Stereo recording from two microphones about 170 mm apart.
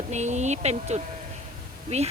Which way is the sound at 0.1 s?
45° right (ahead or behind).